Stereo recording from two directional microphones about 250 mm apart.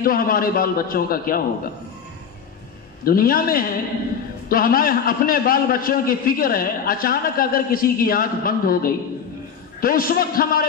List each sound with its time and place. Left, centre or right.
0.0 s a man's voice: left
3.1 s a man's voice: left